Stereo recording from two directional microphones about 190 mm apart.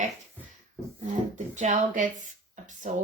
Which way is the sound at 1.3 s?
40° right (ahead or behind).